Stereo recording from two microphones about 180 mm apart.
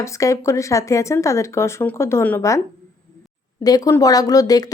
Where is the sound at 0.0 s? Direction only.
15° left (ahead or behind).